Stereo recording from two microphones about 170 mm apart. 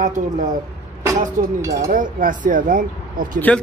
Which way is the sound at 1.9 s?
50° right (ahead or behind).